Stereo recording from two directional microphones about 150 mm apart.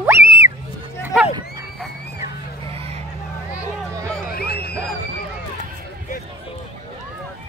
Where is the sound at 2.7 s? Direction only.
40° right (ahead or behind).